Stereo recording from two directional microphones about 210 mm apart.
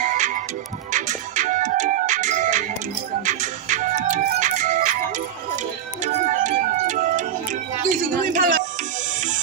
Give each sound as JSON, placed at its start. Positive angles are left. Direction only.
{"t": 0.0, "sound": "music", "side_deg": -35}
{"t": 6.0, "sound": "music", "side_deg": -35}
{"t": 7.9, "sound": "a sound", "side_deg": -40}